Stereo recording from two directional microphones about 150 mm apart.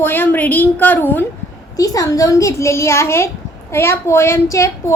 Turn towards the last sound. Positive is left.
turn(degrees=20)  # may be behind; listen again after turning